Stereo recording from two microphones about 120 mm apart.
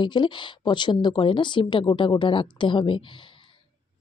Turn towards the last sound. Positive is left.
turn(degrees=45)  # may be behind; listen again after turning